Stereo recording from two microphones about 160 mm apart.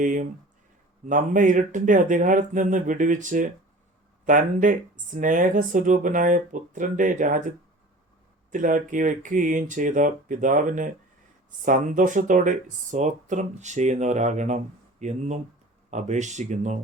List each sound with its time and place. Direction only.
0.0 s speech: 55° right (ahead or behind)
8.5 s speech: 55° right (ahead or behind)